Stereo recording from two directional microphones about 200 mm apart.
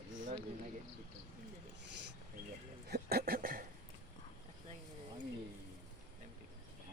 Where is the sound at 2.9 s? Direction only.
50° right (ahead or behind).